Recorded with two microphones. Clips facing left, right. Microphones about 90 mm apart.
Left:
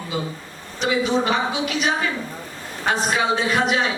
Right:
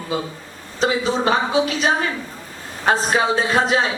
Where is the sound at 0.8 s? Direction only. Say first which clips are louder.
Right 1 dB; 35° right (ahead or behind).